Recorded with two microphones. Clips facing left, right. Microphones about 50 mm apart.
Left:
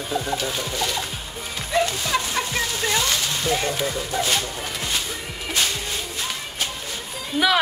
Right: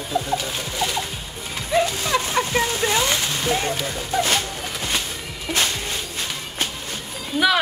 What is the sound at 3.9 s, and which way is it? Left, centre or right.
Speech, right.